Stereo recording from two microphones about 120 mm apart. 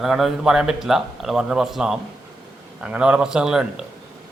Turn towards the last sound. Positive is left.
turn(degrees=-5)  # may be behind; listen again after turning